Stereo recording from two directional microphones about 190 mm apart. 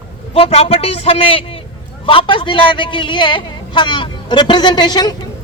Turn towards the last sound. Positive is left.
turn(degrees=20)  # may be behind; listen again after turning